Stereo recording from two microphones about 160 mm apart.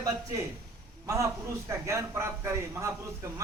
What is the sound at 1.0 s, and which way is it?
A man's voice, 20° right (ahead or behind).